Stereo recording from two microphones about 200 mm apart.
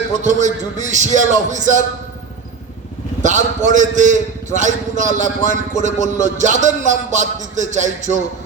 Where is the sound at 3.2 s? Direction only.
40° right (ahead or behind).